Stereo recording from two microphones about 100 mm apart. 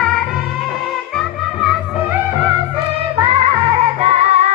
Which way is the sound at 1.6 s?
5° right (ahead or behind).